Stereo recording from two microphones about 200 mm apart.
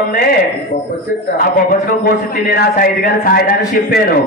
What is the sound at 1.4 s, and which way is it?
A man's voice, 50° left (ahead or behind).